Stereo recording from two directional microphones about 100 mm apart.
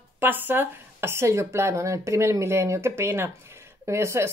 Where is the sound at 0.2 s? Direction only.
20° right (ahead or behind).